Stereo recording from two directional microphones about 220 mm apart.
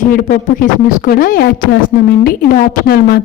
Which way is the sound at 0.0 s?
35° left (ahead or behind).